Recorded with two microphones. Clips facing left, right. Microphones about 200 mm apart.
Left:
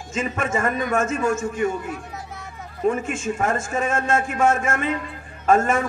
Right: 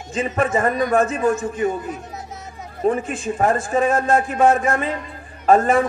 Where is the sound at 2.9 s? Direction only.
35° right (ahead or behind).